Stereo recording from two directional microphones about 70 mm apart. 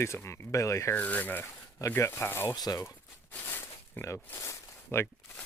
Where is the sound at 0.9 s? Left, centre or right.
Left.